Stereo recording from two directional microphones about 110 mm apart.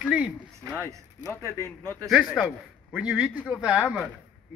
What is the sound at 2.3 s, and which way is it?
Speech, 10° right (ahead or behind).